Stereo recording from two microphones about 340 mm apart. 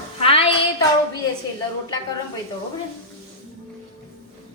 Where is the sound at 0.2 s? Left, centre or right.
Centre.